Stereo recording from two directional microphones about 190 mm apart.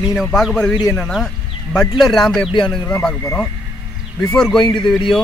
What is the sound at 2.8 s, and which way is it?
A man's voice, 10° left (ahead or behind).